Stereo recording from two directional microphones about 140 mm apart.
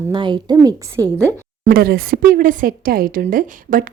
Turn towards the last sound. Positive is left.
turn(degrees=-85)